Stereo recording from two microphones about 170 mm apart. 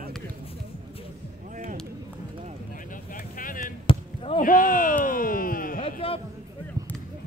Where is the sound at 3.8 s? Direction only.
30° left (ahead or behind).